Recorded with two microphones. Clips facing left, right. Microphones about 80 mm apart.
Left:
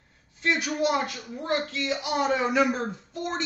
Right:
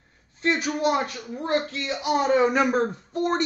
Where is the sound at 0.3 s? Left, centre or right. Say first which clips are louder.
Right 2 dB; right.